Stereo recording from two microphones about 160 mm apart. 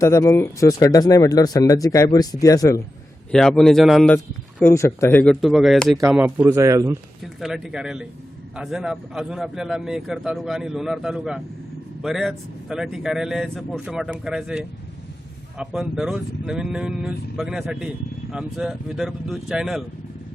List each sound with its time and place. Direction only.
0.0 s speech: 20° left (ahead or behind)
3.3 s speech: 5° left (ahead or behind)
4.6 s speech: 20° left (ahead or behind); by 6.0 s centre (ahead or behind)
6.0 s a man's voice: 15° right (ahead or behind)
7.3 s speech: centre (ahead or behind)